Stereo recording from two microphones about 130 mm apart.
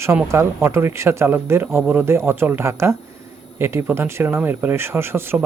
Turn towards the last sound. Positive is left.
turn(degrees=-15)  # may be behind; listen again after turning